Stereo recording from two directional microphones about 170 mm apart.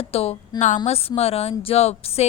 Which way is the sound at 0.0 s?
35° left (ahead or behind).